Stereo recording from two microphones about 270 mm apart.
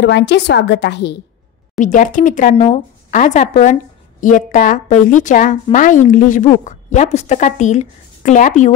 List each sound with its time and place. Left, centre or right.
0.0 s a woman's voice: left
1.8 s a woman's voice: left